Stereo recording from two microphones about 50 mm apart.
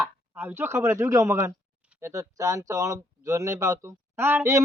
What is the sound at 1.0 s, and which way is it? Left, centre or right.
A man's voice, right.